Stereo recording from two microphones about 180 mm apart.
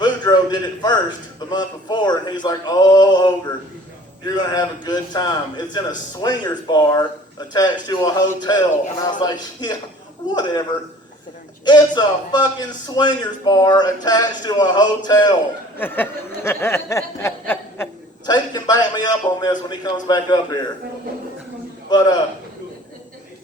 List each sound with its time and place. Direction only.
0.0 s a sound: 25° left (ahead or behind)
1.5 s a man's voice: 25° left (ahead or behind)
4.5 s a man's voice: 25° left (ahead or behind)
11.6 s a man's voice: 25° left (ahead or behind)
15.8 s snicker: 10° left (ahead or behind)
18.3 s a man's voice: 25° left (ahead or behind)
21.8 s a man's voice: 20° left (ahead or behind)